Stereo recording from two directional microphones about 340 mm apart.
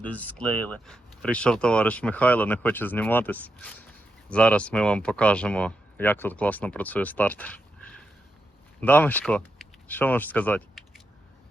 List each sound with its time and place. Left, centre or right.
0.0 s speech: centre
8.8 s speech: centre